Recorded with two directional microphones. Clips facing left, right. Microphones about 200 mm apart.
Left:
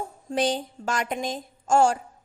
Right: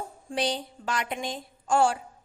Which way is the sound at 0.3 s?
45° left (ahead or behind).